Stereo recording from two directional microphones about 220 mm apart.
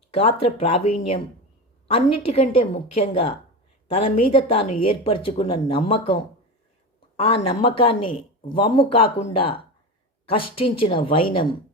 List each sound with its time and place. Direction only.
0.1 s speech: 25° left (ahead or behind)
7.2 s speech: 25° left (ahead or behind)